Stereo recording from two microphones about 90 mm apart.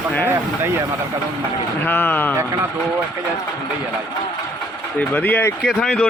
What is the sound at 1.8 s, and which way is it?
Speech, 20° left (ahead or behind).